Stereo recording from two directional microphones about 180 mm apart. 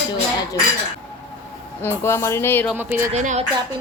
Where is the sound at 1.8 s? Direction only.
15° left (ahead or behind).